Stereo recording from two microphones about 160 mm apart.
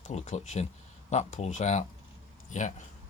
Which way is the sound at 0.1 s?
45° left (ahead or behind).